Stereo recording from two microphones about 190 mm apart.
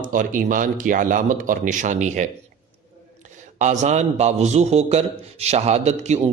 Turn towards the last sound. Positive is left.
turn(degrees=-35)  # may be behind; listen again after turning